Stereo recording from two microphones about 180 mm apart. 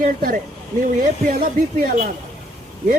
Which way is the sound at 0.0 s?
50° right (ahead or behind).